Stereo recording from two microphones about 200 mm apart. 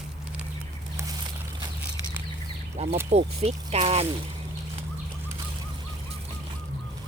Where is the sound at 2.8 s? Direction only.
35° right (ahead or behind).